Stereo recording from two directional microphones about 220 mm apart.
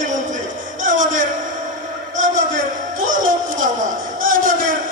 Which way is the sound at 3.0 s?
35° right (ahead or behind).